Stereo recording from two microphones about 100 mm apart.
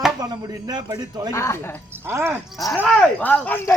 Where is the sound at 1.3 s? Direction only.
30° left (ahead or behind).